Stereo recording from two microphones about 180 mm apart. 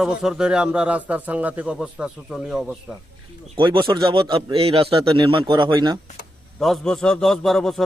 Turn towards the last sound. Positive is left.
turn(degrees=0)  # may be behind; listen again after turning